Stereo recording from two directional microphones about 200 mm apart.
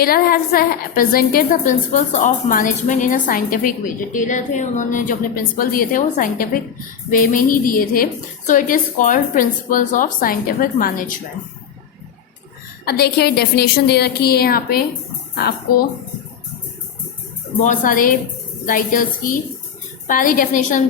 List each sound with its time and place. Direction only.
0.0 s a woman's voice: 50° left (ahead or behind)
12.8 s a woman's voice: 50° left (ahead or behind)
17.6 s a woman's voice: 40° left (ahead or behind)